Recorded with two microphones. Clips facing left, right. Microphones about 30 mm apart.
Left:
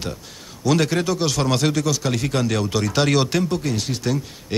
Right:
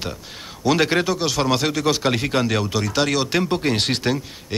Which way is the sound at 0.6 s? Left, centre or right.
Right.